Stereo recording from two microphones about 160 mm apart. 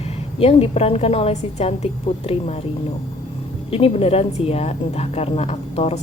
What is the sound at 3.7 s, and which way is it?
A woman's voice, 35° left (ahead or behind).